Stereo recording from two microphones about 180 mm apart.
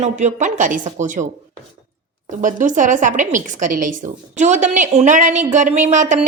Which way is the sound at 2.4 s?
45° right (ahead or behind).